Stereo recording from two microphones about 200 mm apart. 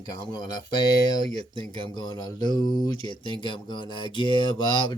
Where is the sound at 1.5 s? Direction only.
20° left (ahead or behind).